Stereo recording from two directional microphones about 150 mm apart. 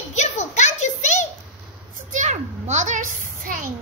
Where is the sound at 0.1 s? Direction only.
50° left (ahead or behind).